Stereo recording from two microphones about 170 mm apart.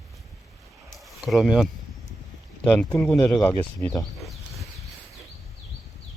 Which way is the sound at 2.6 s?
10° left (ahead or behind).